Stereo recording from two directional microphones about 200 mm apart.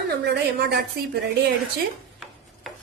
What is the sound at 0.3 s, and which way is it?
Speech, 55° right (ahead or behind).